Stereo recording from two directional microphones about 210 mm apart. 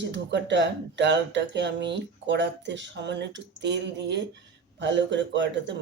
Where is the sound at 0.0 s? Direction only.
55° right (ahead or behind).